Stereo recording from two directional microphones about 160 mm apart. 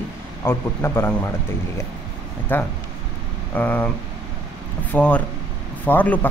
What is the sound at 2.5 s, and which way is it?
Speech, 10° left (ahead or behind).